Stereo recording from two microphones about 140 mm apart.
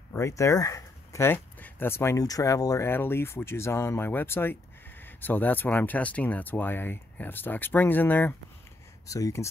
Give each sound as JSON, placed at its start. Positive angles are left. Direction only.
{"t": 0.1, "sound": "speech", "side_deg": 20}
{"t": 9.0, "sound": "speech", "side_deg": 25}